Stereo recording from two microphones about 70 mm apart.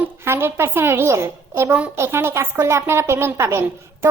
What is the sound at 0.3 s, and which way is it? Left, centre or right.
A woman's voice, right.